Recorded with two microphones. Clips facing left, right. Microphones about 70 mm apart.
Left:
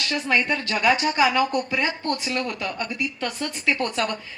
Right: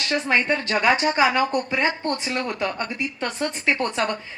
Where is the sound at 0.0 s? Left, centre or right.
Right.